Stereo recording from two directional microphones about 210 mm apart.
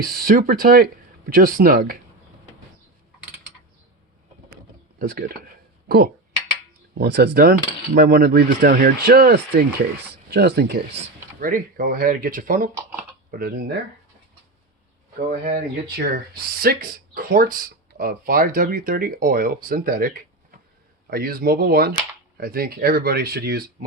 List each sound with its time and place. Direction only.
0.0 s speech: 45° right (ahead or behind)
4.9 s speech: 45° right (ahead or behind)
7.0 s speech: 50° right (ahead or behind)
16.0 s speech: 45° right (ahead or behind)